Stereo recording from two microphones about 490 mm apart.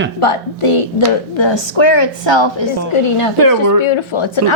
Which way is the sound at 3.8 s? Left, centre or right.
Left.